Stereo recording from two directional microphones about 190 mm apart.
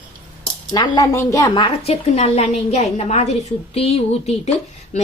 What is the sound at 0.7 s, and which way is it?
A woman's voice, 20° left (ahead or behind).